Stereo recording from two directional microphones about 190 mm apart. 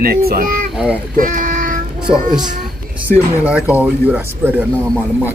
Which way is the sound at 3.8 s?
10° right (ahead or behind).